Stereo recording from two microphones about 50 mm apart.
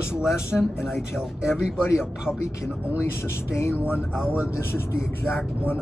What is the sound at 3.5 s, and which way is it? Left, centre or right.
Speech, left.